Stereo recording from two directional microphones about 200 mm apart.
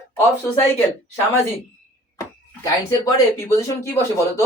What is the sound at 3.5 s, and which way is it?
Speech, 15° left (ahead or behind).